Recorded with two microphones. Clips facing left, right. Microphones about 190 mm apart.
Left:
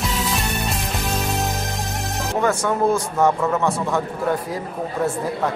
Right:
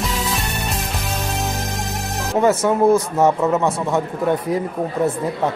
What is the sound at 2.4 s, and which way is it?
Speech, 20° right (ahead or behind).